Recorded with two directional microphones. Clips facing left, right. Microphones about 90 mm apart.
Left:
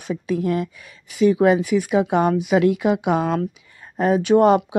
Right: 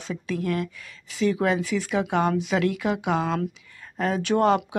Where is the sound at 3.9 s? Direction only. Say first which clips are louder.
Left 7 dB; 20° left (ahead or behind).